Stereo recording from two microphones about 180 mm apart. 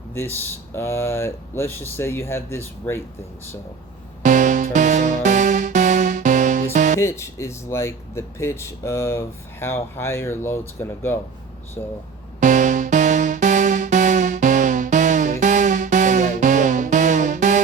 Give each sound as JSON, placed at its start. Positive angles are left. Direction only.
{"t": 0.1, "sound": "speech", "side_deg": 10}
{"t": 4.2, "sound": "music", "side_deg": -45}
{"t": 7.0, "sound": "speech", "side_deg": 15}
{"t": 12.4, "sound": "music", "side_deg": -45}